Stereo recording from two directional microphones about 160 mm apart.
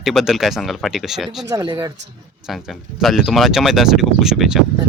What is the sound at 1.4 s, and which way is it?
Speech, 25° right (ahead or behind).